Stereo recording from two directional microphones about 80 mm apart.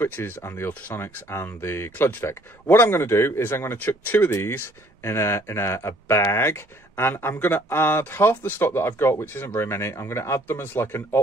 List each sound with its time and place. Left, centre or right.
0.0 s speech: left